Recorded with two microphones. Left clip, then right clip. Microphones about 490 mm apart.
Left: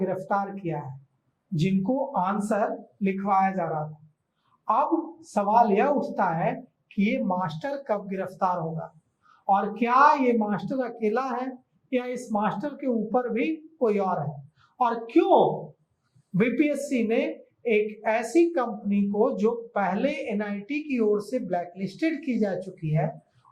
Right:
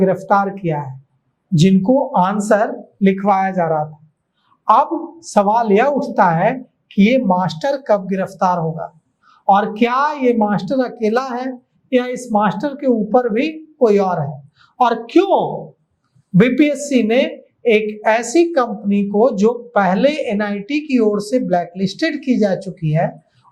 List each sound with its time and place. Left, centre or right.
0.0 s a woman's voice: right
2.1 s a woman's voice: right
5.3 s a woman's voice: right
16.4 s a woman's voice: right